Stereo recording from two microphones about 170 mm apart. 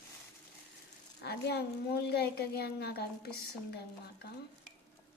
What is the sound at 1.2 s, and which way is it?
A woman's voice, 70° left (ahead or behind).